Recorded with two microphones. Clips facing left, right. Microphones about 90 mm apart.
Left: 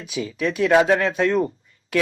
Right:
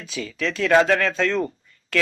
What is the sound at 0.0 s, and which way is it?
Speech, 15° left (ahead or behind).